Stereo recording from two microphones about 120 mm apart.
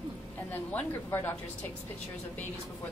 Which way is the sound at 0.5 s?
15° left (ahead or behind).